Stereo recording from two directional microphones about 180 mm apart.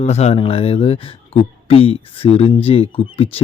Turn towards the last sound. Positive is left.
turn(degrees=30)  # may be behind; listen again after turning